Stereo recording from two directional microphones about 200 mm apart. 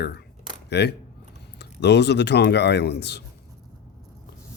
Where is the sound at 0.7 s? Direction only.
55° left (ahead or behind).